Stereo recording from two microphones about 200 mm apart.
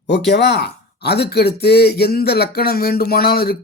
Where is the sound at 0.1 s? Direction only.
55° left (ahead or behind).